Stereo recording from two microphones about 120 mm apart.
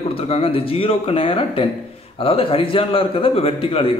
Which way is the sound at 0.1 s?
55° left (ahead or behind).